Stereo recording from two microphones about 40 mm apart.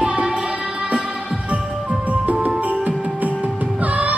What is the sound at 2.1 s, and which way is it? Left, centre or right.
Music, right.